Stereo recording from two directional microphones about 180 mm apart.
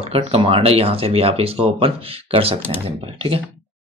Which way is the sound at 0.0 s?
30° right (ahead or behind).